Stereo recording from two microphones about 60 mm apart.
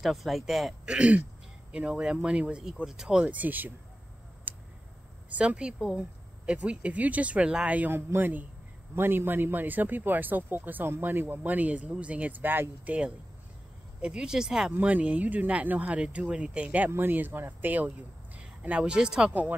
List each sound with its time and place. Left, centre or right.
0.0 s speech: centre
0.8 s speech: centre
2.6 s speech: centre
3.3 s speech: right
4.5 s a sound: right
5.3 s speech: right
7.9 s speech: right
14.0 s speech: centre
14.7 s speech: right
16.9 s speech: right; by 19.3 s centre